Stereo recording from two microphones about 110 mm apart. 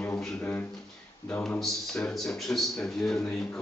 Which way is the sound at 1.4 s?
5° left (ahead or behind).